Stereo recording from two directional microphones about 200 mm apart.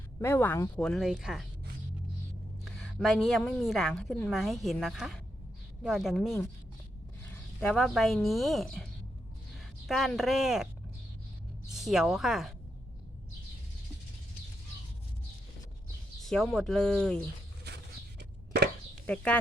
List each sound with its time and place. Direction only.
0.2 s a woman's voice: 15° left (ahead or behind)
3.0 s a woman's voice: centre (ahead or behind)
7.6 s a woman's voice: 5° left (ahead or behind)
11.7 s a woman's voice: centre (ahead or behind)
16.2 s a woman's voice: 5° left (ahead or behind)
18.2 s a sound: 55° right (ahead or behind)
19.0 s speech: 5° left (ahead or behind)